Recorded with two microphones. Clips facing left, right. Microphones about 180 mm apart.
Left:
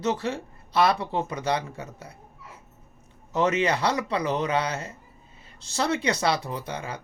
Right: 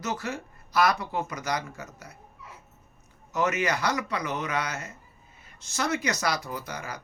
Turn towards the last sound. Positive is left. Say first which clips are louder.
# left 3 dB
turn(degrees=25)  # may be behind; listen again after turning